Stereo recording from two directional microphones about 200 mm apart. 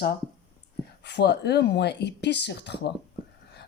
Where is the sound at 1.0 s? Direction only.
55° left (ahead or behind).